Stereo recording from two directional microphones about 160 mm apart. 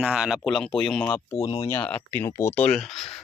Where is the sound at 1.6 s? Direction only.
15° left (ahead or behind).